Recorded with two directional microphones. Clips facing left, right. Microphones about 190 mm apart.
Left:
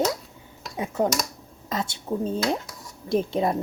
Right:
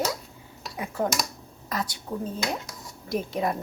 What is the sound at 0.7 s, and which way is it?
Speech, 20° left (ahead or behind).